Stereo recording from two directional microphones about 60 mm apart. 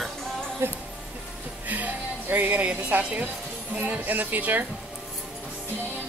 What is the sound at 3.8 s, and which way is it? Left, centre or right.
Speech, right.